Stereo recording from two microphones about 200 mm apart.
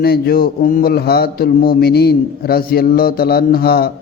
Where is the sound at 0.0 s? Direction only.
50° left (ahead or behind).